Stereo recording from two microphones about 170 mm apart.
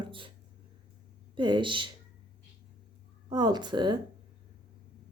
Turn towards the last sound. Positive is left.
turn(degrees=-25)  # may be behind; listen again after turning